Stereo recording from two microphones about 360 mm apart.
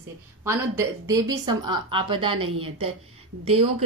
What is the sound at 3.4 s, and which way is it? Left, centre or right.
Speech, centre.